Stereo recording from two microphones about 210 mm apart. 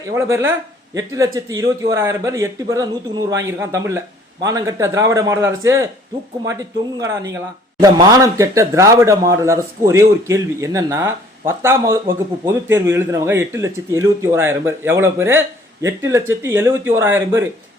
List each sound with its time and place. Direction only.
0.1 s speech: 15° right (ahead or behind)